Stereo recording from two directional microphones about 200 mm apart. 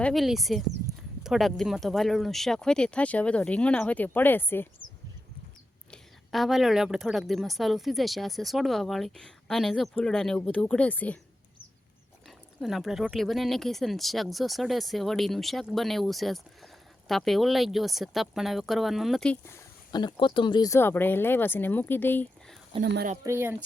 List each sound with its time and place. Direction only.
0.0 s a woman's voice: centre (ahead or behind)
5.9 s a woman's voice: centre (ahead or behind)
12.5 s a woman's voice: centre (ahead or behind)
22.8 s speech: 50° right (ahead or behind)
23.2 s speech: 10° right (ahead or behind)